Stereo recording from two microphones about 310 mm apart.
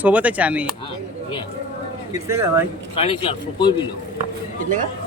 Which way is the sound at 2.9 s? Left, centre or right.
Centre.